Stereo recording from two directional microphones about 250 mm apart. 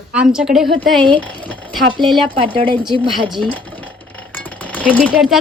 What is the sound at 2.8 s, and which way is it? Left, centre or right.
Speech, centre.